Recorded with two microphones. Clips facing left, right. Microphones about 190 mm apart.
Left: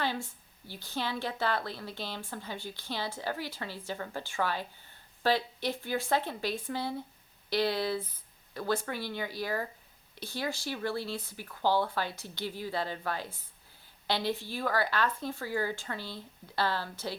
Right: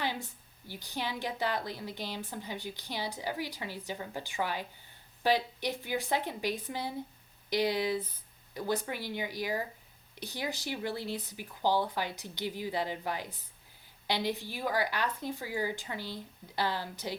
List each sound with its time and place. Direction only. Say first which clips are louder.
0.0 s a woman's voice: left 2 dB; 15° right (ahead or behind)